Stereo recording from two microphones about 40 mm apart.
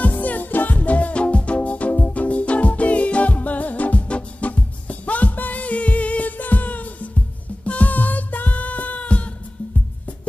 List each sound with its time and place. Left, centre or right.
0.0 s music: left